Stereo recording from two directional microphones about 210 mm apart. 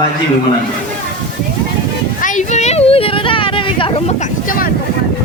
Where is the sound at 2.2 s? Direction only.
35° left (ahead or behind).